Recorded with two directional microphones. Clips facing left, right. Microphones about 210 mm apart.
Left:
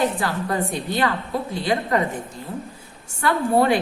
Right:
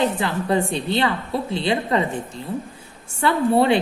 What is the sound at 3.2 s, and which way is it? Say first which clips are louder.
Speech: right 1 dB; 25° right (ahead or behind).